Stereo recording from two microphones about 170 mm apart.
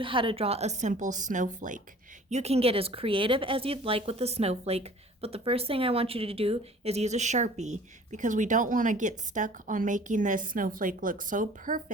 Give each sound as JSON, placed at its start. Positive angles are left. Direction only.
{"t": 0.0, "sound": "speech", "side_deg": -30}
{"t": 2.3, "sound": "a woman's voice", "side_deg": -40}